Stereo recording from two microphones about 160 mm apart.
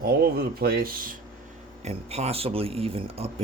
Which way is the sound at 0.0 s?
70° right (ahead or behind).